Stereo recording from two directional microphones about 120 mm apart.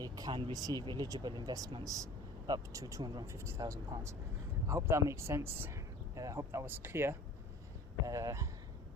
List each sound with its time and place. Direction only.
0.0 s speech: 40° right (ahead or behind)
0.5 s speech: 30° right (ahead or behind)